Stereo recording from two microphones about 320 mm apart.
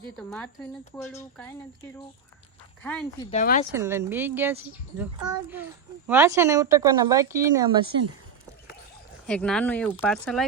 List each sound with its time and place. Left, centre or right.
0.2 s speech: centre
2.8 s speech: centre
3.2 s speech: left
3.7 s a woman's voice: centre
9.2 s speech: centre